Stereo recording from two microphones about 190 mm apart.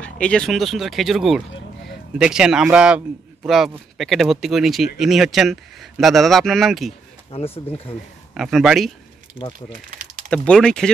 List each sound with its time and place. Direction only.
0.0 s speech: 5° left (ahead or behind)
7.2 s speech: 30° left (ahead or behind)
8.4 s speech: centre (ahead or behind)
9.5 s speech: 40° right (ahead or behind)
10.3 s speech: 5° left (ahead or behind)